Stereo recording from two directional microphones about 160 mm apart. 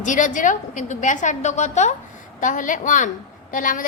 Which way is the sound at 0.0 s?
55° left (ahead or behind).